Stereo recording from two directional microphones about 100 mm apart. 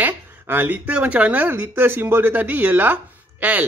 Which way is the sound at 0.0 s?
20° right (ahead or behind).